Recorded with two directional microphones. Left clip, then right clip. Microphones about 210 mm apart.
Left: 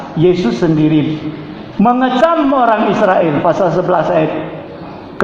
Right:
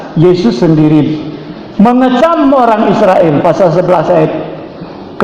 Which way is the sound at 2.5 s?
25° right (ahead or behind).